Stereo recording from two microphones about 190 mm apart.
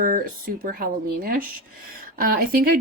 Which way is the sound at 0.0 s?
50° right (ahead or behind).